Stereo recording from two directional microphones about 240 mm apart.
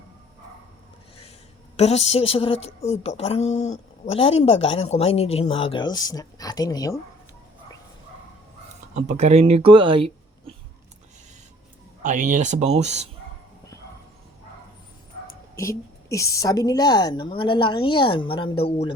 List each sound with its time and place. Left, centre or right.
1.7 s a woman's voice: left
9.0 s speech: right
12.0 s speech: right
15.5 s a woman's voice: centre